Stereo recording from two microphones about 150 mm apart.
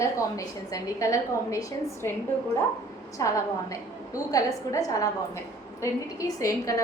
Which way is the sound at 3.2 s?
25° left (ahead or behind).